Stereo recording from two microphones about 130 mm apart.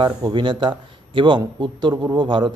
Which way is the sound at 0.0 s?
35° right (ahead or behind).